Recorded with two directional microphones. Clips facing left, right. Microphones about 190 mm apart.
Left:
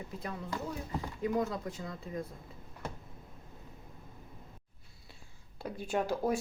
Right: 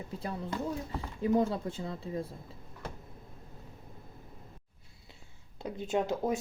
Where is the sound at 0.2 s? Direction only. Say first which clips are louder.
Right 3 dB; 30° right (ahead or behind).